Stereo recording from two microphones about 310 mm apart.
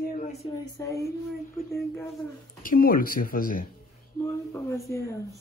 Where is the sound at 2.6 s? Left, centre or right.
Left.